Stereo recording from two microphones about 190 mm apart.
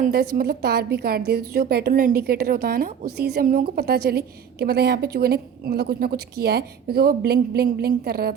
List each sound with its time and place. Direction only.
0.0 s a woman's voice: 50° right (ahead or behind)